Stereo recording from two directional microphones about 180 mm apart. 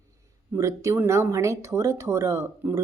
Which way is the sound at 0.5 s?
15° right (ahead or behind).